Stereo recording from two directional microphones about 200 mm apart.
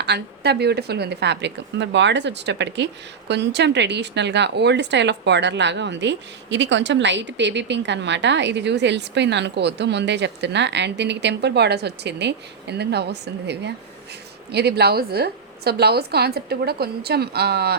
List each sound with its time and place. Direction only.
0.0 s a woman's voice: 55° right (ahead or behind)